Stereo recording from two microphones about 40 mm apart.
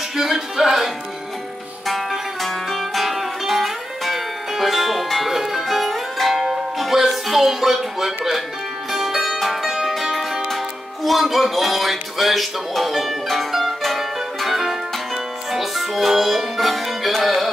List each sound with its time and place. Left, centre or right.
0.1 s music: centre
1.9 s music: centre